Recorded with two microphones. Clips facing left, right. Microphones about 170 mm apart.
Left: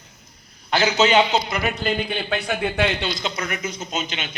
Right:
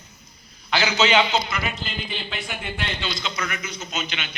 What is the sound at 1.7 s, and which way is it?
Speech, 60° left (ahead or behind).